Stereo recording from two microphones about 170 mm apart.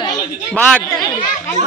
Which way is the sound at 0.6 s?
10° left (ahead or behind).